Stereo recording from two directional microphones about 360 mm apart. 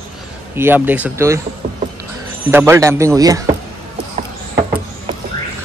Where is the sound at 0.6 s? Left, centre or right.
Centre.